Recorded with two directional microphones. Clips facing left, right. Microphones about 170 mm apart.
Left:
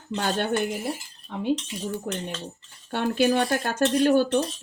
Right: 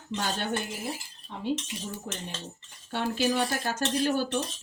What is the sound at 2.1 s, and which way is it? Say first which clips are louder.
Speech: left 7 dB; 60° left (ahead or behind).